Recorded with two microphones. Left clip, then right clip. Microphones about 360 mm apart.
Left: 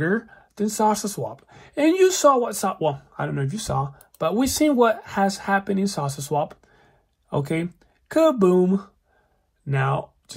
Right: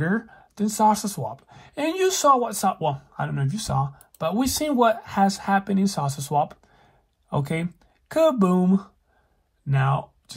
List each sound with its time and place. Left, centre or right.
0.3 s speech: centre